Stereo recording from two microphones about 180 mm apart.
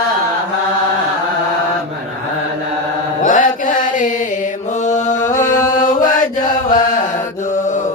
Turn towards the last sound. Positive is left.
turn(degrees=45)  # may be behind; listen again after turning